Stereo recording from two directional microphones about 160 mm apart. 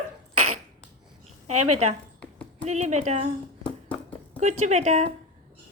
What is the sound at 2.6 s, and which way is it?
Speech, 45° right (ahead or behind).